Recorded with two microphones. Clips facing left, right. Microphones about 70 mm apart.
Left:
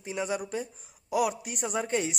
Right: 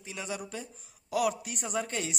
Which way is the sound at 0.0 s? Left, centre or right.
Left.